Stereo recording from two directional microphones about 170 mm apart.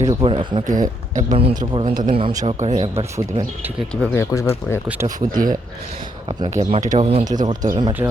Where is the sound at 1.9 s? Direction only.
50° right (ahead or behind).